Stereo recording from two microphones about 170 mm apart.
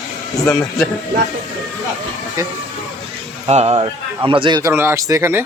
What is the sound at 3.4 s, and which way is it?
Speech, 35° right (ahead or behind).